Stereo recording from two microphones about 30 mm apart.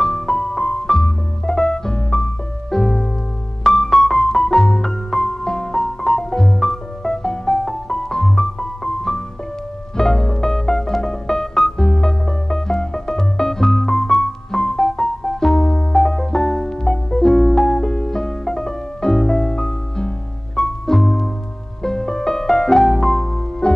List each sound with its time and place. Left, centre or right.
0.0 s piano: centre
2.7 s music: centre